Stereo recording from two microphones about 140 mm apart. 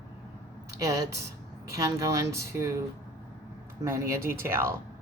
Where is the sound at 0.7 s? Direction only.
20° right (ahead or behind).